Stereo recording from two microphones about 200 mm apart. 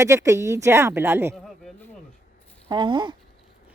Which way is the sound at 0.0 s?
15° right (ahead or behind).